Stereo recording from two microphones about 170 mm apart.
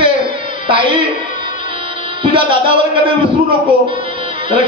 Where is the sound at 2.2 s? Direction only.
30° right (ahead or behind).